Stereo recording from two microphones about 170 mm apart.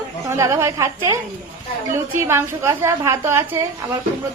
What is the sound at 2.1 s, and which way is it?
A woman's voice, 15° right (ahead or behind).